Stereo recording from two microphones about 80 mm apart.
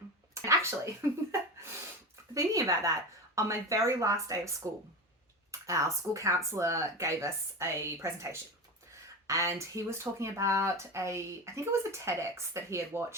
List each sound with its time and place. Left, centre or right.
0.4 s a sound: right
1.0 s speech: right
2.3 s speech: right